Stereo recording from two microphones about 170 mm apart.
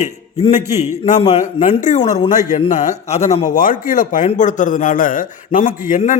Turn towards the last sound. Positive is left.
turn(degrees=50)  # may be behind; listen again after turning